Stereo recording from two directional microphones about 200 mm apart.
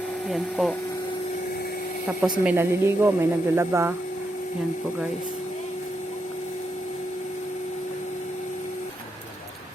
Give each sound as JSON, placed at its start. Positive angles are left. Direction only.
{"t": 0.3, "sound": "speech", "side_deg": 0}
{"t": 2.4, "sound": "a woman's voice", "side_deg": -10}